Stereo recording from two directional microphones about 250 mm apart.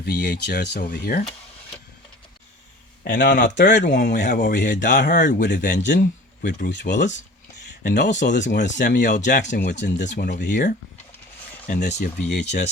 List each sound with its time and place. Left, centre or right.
0.0 s speech: left
3.0 s speech: left
4.0 s speech: left
4.7 s speech: left
4.9 s speech: left
6.7 s speech: left
8.1 s speech: left
8.4 s speech: left
9.0 s speech: left
9.5 s speech: left
11.7 s speech: left
11.9 s speech: left